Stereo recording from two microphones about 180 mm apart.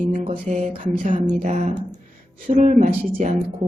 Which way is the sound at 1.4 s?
40° right (ahead or behind).